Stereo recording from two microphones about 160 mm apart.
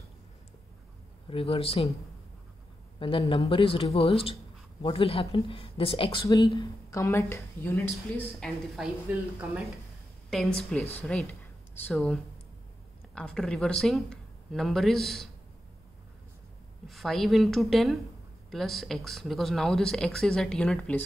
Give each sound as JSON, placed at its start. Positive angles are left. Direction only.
{"t": 1.3, "sound": "speech", "side_deg": 35}
{"t": 3.0, "sound": "speech", "side_deg": 35}
{"t": 8.4, "sound": "speech", "side_deg": 0}
{"t": 10.3, "sound": "speech", "side_deg": 5}
{"t": 16.8, "sound": "speech", "side_deg": 0}